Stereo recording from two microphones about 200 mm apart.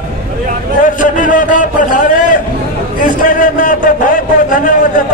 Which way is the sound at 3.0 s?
40° left (ahead or behind).